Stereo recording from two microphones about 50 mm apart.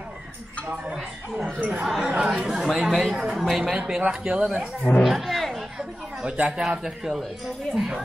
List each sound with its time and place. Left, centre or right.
1.4 s speech: right; by 3.7 s centre
3.7 s speech: centre
5.0 s speech: centre
6.3 s speech: right
6.8 s speech: centre